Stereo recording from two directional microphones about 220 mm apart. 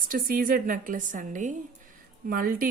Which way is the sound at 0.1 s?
40° right (ahead or behind).